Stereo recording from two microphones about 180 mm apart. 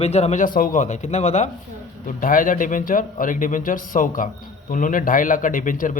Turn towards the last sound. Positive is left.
turn(degrees=45)  # may be behind; listen again after turning